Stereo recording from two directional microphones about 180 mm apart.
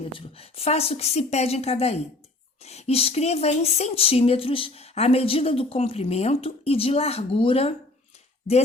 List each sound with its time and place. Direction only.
0.0 s speech: 30° left (ahead or behind)